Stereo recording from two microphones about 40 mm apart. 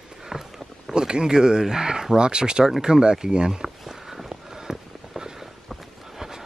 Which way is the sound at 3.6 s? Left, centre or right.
Centre.